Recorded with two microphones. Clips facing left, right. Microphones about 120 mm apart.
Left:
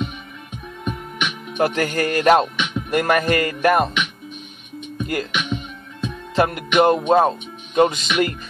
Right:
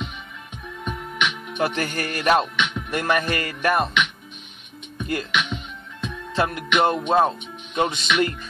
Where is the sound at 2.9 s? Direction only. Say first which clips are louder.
Left 6 dB; 45° left (ahead or behind).